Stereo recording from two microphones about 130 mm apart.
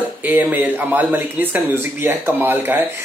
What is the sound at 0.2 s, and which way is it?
Speech, 15° right (ahead or behind).